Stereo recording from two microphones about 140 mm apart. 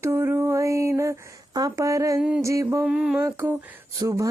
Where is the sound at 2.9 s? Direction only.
5° right (ahead or behind).